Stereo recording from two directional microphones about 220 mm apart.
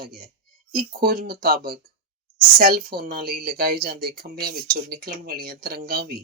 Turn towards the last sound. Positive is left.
turn(degrees=-45)  # may be behind; listen again after turning